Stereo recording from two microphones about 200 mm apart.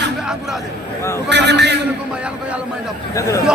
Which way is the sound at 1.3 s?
60° right (ahead or behind).